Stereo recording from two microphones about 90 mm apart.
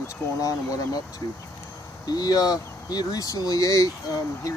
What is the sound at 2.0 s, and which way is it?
Speech, 45° left (ahead or behind).